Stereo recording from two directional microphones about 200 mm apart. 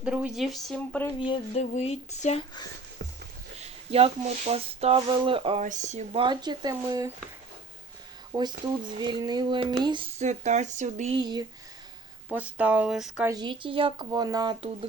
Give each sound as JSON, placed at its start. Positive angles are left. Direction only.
{"t": 0.0, "sound": "speech", "side_deg": -5}
{"t": 1.2, "sound": "a sound", "side_deg": 25}
{"t": 1.6, "sound": "speech", "side_deg": 35}
{"t": 3.6, "sound": "speech", "side_deg": -30}
{"t": 8.3, "sound": "speech", "side_deg": -20}
{"t": 11.2, "sound": "speech", "side_deg": -20}
{"t": 12.3, "sound": "speech", "side_deg": -5}
{"t": 13.3, "sound": "speech", "side_deg": -25}